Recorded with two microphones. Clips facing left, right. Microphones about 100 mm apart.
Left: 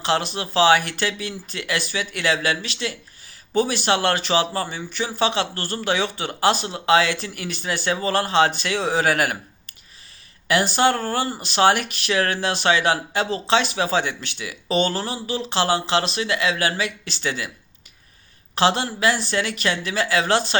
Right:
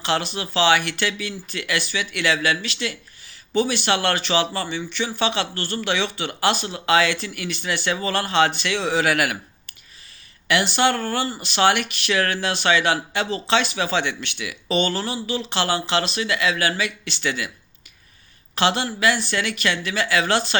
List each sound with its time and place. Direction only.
0.0 s speech: 45° left (ahead or behind)
18.5 s speech: 40° left (ahead or behind)